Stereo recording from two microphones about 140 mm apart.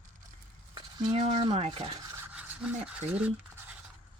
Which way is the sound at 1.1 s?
45° right (ahead or behind).